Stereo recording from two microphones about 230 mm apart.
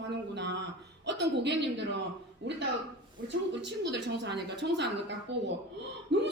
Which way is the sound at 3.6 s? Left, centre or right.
Right.